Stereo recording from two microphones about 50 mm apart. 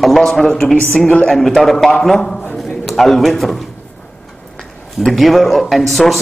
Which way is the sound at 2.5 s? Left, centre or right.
Centre.